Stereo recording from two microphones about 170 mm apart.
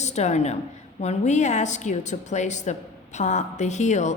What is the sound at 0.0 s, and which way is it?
A woman's voice, 40° left (ahead or behind).